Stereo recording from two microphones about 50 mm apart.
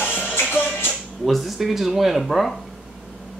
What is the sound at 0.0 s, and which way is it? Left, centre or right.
Music, left.